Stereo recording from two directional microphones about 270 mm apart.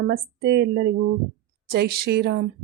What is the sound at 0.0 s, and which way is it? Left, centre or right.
Speech, right.